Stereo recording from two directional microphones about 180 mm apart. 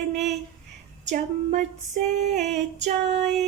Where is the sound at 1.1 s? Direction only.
40° right (ahead or behind).